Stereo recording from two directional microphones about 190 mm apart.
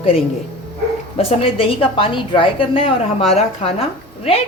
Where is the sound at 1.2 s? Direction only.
30° left (ahead or behind).